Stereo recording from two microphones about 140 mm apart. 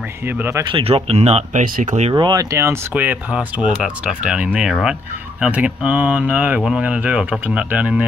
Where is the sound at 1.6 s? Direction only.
70° right (ahead or behind).